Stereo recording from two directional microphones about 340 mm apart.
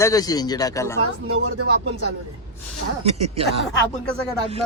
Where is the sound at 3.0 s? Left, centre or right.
Centre.